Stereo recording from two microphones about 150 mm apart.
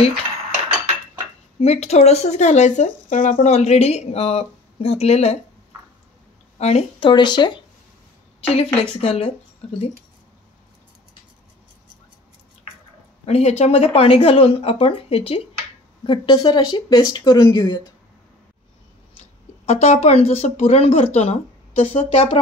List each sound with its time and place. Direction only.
1.6 s speech: 45° left (ahead or behind)
6.6 s speech: 45° left (ahead or behind)
8.5 s speech: 40° left (ahead or behind)
13.2 s speech: 45° left (ahead or behind)
16.1 s speech: 30° left (ahead or behind)
19.6 s speech: 45° left (ahead or behind)